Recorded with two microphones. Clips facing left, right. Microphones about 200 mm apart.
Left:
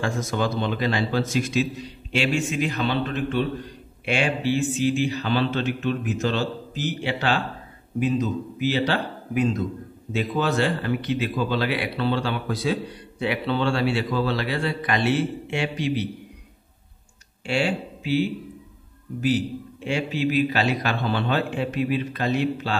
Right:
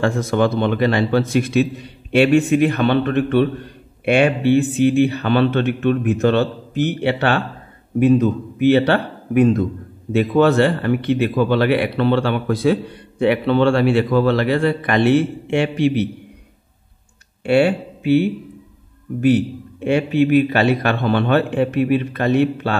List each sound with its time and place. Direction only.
0.0 s a man's voice: 60° right (ahead or behind)
17.5 s a man's voice: 60° right (ahead or behind)